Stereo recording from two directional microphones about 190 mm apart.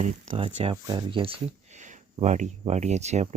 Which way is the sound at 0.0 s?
35° right (ahead or behind).